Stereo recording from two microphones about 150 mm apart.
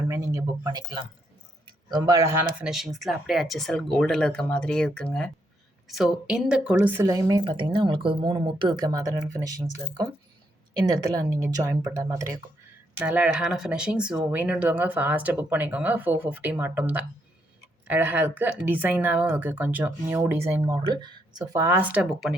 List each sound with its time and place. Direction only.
0.1 s a sound: 20° right (ahead or behind)
1.6 s speech: 30° right (ahead or behind); by 5.3 s 5° left (ahead or behind)
6.0 s a woman's voice: 5° right (ahead or behind); by 8.9 s 35° right (ahead or behind)
8.9 s a woman's voice: 25° right (ahead or behind)
13.0 s speech: 10° right (ahead or behind)